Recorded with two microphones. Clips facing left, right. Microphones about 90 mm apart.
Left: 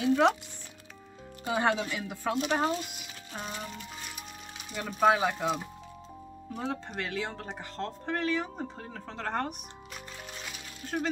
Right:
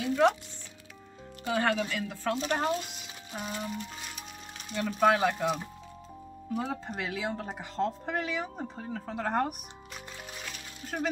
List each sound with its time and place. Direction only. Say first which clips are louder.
1.4 s speech: even; 15° left (ahead or behind)
3.3 s speech: right 2 dB; 5° right (ahead or behind)
4.6 s speech: even; 5° left (ahead or behind); by 9.6 s 10° right (ahead or behind)
10.4 s music: even; centre (ahead or behind)